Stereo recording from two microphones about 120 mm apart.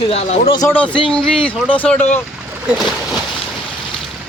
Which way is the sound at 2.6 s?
5° right (ahead or behind).